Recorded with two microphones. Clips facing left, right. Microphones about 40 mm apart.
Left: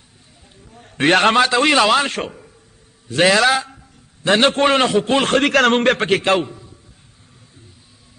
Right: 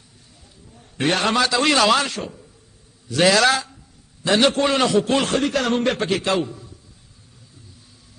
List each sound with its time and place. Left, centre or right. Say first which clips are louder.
0.7 s a man's voice: left 6 dB; left
1.4 s a man's voice: left 4 dB; left
2.0 s a man's voice: left 5 dB; left
3.1 s a man's voice: left 2 dB; left
5.2 s a man's voice: left 5 dB; left
5.5 s a man's voice: left 6 dB; left
6.4 s a sound: even; left